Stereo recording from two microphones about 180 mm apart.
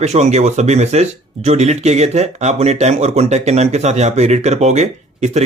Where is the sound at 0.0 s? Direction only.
40° right (ahead or behind).